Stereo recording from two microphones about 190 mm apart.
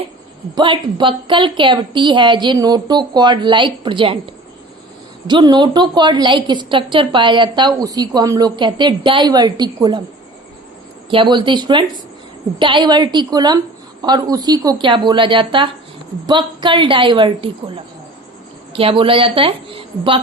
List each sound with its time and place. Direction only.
0.5 s a woman's voice: 25° right (ahead or behind)
5.3 s a woman's voice: 25° right (ahead or behind)
11.1 s a woman's voice: 25° right (ahead or behind)
18.7 s a woman's voice: 30° right (ahead or behind)